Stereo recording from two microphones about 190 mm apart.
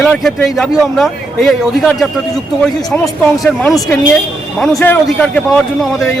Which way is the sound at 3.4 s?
Centre (ahead or behind).